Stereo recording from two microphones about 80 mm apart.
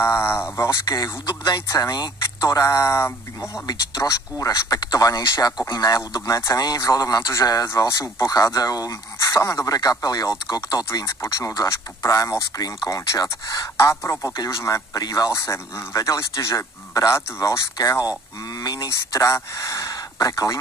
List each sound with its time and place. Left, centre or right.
0.0 s a man's voice: left
0.8 s speech: left
1.2 s speech: left
1.7 s a man's voice: left
3.6 s a man's voice: left
14.3 s speech: left
15.3 s a man's voice: left
18.6 s speech: left
18.9 s speech: left